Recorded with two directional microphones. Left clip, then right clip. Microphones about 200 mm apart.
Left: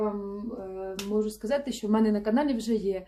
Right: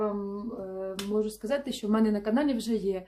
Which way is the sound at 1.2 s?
15° right (ahead or behind).